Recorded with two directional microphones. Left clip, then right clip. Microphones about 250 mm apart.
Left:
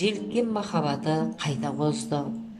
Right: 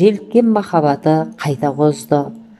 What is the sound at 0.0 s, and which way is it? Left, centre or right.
Speech, right.